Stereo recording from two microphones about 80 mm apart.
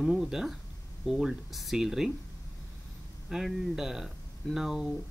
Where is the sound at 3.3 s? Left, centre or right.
Centre.